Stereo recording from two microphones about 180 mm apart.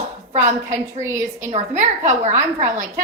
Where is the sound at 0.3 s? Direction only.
45° right (ahead or behind).